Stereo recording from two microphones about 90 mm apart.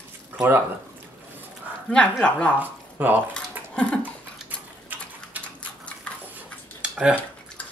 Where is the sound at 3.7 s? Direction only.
10° left (ahead or behind).